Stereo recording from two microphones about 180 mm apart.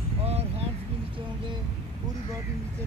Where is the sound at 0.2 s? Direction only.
35° right (ahead or behind).